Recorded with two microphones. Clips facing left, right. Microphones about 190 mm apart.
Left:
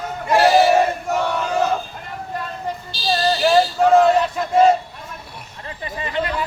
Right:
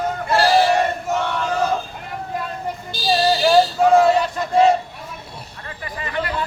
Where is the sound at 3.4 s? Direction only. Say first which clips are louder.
Left 1 dB; centre (ahead or behind).